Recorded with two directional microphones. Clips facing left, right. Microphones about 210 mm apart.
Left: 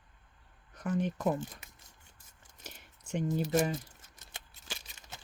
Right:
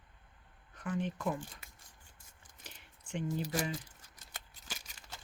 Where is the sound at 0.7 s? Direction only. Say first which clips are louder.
Left 4 dB; 40° left (ahead or behind).